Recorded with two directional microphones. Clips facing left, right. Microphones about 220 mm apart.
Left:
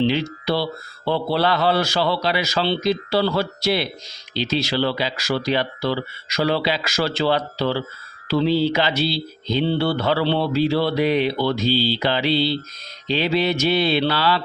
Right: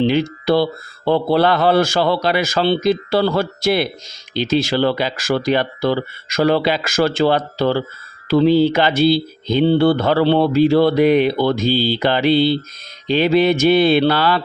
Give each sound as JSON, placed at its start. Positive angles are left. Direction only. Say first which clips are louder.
{"t": 0.0, "sound": "speech", "louder": "right 4 dB", "side_deg": -50}